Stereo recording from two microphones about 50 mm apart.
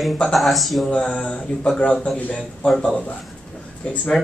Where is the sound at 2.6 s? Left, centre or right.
Centre.